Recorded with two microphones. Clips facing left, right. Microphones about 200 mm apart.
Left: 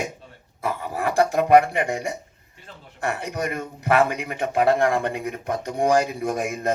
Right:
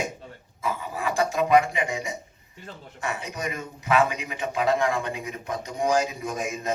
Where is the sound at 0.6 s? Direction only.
65° left (ahead or behind).